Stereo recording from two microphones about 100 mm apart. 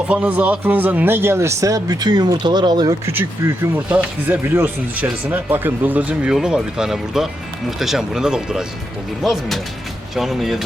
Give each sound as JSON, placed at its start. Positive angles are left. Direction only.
{"t": 0.1, "sound": "speech", "side_deg": -15}
{"t": 3.1, "sound": "speech", "side_deg": -20}